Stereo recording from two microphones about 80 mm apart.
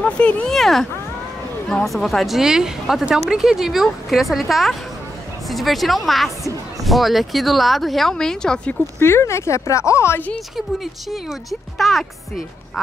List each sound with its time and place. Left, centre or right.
0.0 s speech: centre
0.6 s a woman's voice: centre
9.0 s speech: left
10.5 s a woman's voice: centre